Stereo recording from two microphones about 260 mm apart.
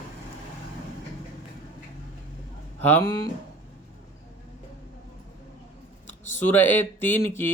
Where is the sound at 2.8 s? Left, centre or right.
Centre.